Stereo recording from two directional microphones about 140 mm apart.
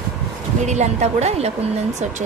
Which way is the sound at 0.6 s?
55° right (ahead or behind).